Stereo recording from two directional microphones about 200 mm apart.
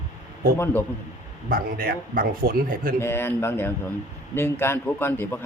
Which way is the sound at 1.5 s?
45° right (ahead or behind).